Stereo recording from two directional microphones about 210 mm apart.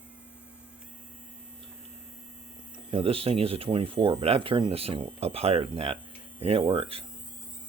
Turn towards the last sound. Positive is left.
turn(degrees=-25)  # may be behind; listen again after turning